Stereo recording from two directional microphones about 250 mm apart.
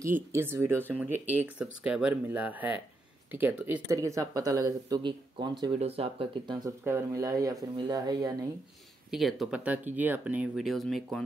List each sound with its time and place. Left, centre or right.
0.0 s speech: centre
9.1 s speech: centre